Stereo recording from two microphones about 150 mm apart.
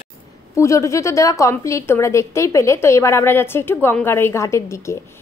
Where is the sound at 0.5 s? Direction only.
20° left (ahead or behind).